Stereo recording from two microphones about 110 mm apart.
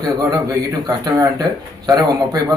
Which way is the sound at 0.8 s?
35° right (ahead or behind).